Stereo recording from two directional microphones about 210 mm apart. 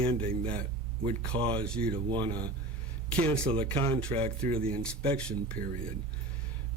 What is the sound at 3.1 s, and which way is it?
Speech, 5° left (ahead or behind).